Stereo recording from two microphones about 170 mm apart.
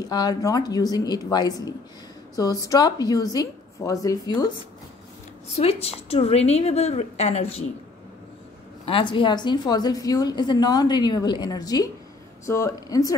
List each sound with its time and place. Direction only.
0.1 s a woman's voice: 25° left (ahead or behind)
5.6 s a woman's voice: 35° left (ahead or behind)
8.8 s a woman's voice: 30° left (ahead or behind)